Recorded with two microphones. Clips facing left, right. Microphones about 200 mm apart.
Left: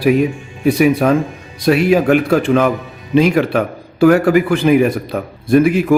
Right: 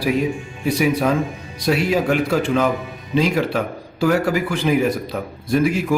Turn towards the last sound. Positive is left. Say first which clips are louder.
# left 7 dB
turn(degrees=55)  # may be behind; listen again after turning